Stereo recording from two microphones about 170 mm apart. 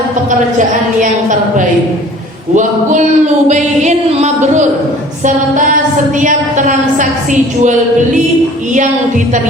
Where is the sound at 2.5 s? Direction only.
45° right (ahead or behind).